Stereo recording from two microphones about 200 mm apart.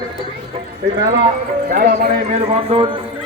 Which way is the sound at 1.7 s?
55° right (ahead or behind).